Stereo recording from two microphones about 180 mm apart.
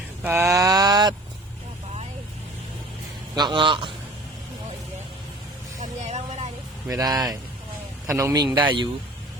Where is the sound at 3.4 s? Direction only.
25° right (ahead or behind).